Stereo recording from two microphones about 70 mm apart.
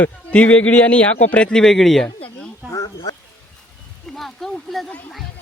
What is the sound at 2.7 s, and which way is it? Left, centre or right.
Speech, left.